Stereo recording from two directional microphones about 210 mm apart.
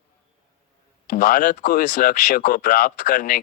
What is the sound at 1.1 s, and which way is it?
Speech, 40° left (ahead or behind).